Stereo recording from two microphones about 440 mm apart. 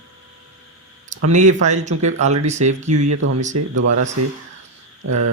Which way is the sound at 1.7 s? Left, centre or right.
Centre.